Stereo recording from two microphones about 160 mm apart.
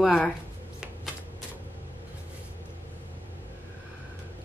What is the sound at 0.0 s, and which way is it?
Speech, 5° left (ahead or behind).